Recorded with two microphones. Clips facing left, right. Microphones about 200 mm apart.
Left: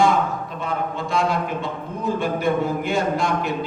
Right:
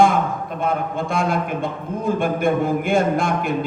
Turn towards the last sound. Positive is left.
turn(degrees=-55)  # may be behind; listen again after turning